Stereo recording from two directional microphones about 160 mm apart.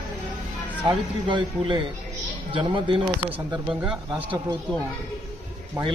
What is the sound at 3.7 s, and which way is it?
Speech, 5° right (ahead or behind).